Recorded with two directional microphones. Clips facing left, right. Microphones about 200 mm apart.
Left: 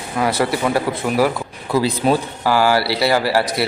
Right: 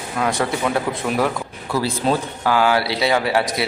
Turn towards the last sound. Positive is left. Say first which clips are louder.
# left 2 dB
turn(degrees=0)  # may be behind; listen again after turning